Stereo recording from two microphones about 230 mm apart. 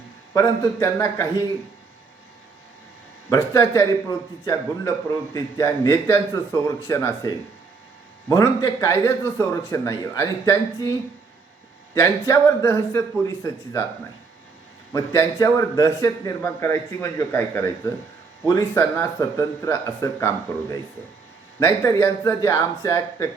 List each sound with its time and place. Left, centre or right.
0.3 s a man's voice: centre
3.2 s a man's voice: centre
11.9 s a man's voice: centre
14.9 s a man's voice: centre